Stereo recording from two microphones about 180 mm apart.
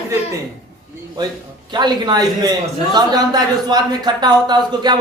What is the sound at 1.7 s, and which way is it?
Speech, 25° right (ahead or behind).